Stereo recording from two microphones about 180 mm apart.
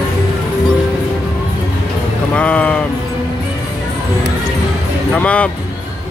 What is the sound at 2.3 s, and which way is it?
Vehicle, 5° left (ahead or behind).